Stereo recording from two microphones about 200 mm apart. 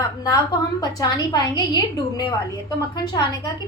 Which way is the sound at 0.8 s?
20° left (ahead or behind).